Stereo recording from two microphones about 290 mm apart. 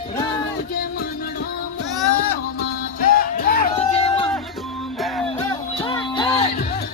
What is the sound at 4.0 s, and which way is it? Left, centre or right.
Music, centre.